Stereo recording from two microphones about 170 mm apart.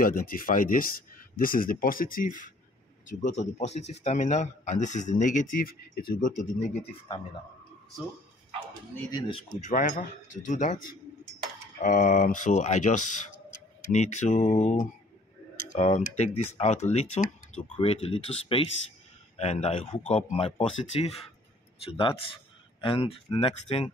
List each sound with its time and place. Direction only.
0.0 s a man's voice: 55° left (ahead or behind)
9.1 s speech: 25° left (ahead or behind)
9.6 s a man's voice: 45° left (ahead or behind)
11.8 s a man's voice: 50° left (ahead or behind); by 23.9 s 30° left (ahead or behind)